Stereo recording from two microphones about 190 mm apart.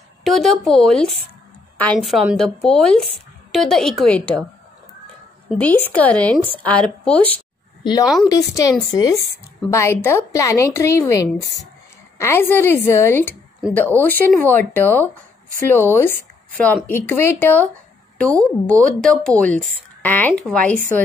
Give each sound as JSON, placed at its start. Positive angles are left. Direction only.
{"t": 0.2, "sound": "a woman's voice", "side_deg": 0}
{"t": 5.5, "sound": "speech", "side_deg": 10}
{"t": 7.8, "sound": "a woman's voice", "side_deg": 20}